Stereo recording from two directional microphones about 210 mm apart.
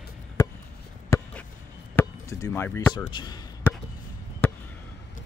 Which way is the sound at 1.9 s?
15° left (ahead or behind).